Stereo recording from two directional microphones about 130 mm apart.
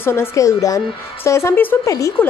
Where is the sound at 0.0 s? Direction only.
15° left (ahead or behind).